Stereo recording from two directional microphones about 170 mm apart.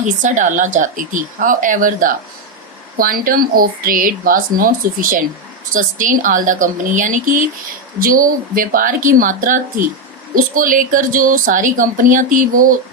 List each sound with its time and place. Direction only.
0.2 s a woman's voice: 45° right (ahead or behind)